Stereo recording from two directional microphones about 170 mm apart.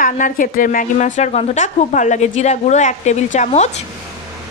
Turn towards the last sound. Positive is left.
turn(degrees=45)  # may be behind; listen again after turning